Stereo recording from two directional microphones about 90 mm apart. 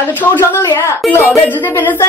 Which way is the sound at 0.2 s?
20° left (ahead or behind).